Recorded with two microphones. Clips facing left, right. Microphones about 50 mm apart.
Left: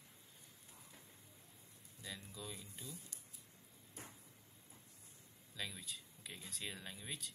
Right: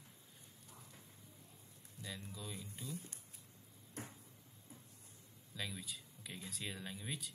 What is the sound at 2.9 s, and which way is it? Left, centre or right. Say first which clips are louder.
Speech: right 7 dB; right.